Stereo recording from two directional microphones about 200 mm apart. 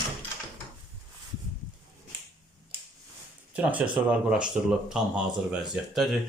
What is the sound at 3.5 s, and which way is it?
Speech, 5° right (ahead or behind).